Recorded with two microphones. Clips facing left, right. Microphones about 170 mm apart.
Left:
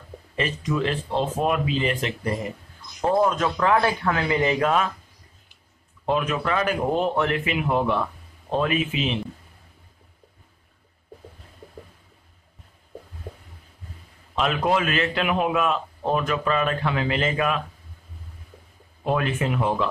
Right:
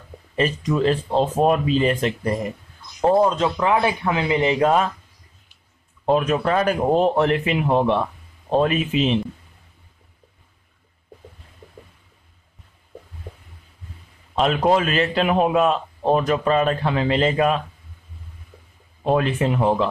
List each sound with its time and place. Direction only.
0.4 s a man's voice: 35° right (ahead or behind)
3.0 s speech: 30° right (ahead or behind)
6.0 s a man's voice: 35° right (ahead or behind)
14.4 s a man's voice: 30° right (ahead or behind)
19.1 s a man's voice: 30° right (ahead or behind)